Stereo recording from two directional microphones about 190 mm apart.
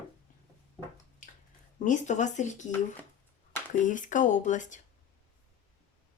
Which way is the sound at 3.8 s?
45° left (ahead or behind).